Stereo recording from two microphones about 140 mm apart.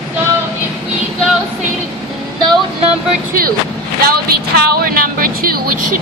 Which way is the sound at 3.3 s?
90° right.